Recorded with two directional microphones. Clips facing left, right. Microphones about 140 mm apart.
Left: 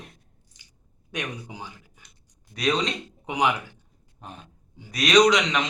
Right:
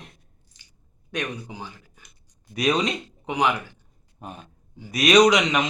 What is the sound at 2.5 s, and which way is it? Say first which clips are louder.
Speech: right 2 dB; 10° right (ahead or behind).